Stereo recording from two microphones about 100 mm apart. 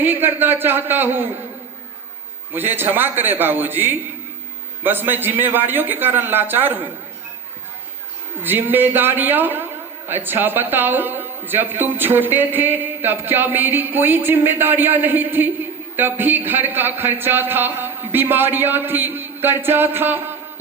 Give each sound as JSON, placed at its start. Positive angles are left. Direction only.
{"t": 0.0, "sound": "a man's voice", "side_deg": -20}
{"t": 2.5, "sound": "a man's voice", "side_deg": -20}
{"t": 8.4, "sound": "a man's voice", "side_deg": -20}